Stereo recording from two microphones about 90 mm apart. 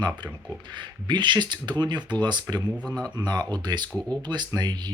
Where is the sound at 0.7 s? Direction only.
60° right (ahead or behind).